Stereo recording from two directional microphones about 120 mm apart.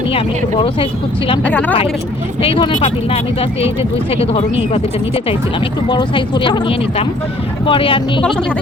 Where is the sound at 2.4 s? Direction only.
45° left (ahead or behind).